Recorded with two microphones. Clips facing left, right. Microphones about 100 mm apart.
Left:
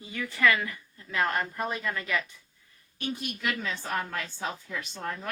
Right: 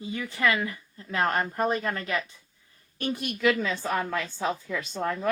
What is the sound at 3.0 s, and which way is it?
Speech, 55° right (ahead or behind).